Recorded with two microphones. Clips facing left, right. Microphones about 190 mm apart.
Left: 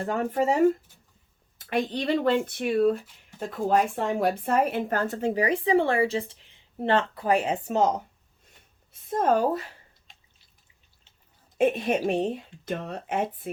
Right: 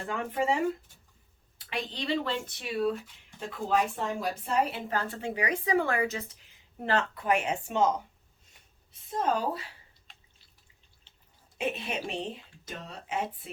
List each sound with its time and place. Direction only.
0.0 s a woman's voice: 40° left (ahead or behind)
8.4 s a sound: 55° left (ahead or behind)
11.5 s speech: 50° left (ahead or behind)